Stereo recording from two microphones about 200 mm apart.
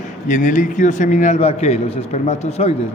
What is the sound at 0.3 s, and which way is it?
A man's voice, 40° left (ahead or behind).